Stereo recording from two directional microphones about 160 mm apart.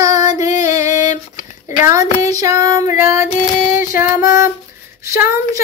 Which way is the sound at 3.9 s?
20° right (ahead or behind).